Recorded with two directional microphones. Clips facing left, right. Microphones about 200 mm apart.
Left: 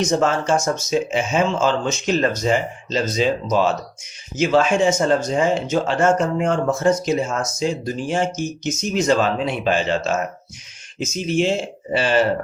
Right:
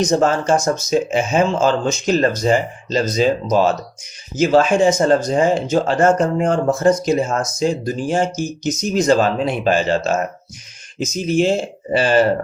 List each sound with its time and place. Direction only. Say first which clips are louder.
0.0 s speech: right 3 dB; 35° right (ahead or behind)